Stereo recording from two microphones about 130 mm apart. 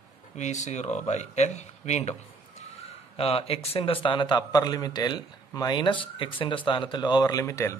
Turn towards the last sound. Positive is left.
turn(degrees=25)  # may be behind; listen again after turning